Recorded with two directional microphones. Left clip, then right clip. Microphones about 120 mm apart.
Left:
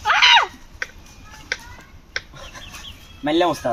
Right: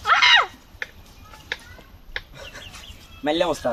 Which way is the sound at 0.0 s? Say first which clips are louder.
Left 2 dB; 20° right (ahead or behind).